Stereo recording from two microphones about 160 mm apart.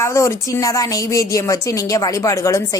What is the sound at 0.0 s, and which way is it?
A woman's voice, 15° left (ahead or behind).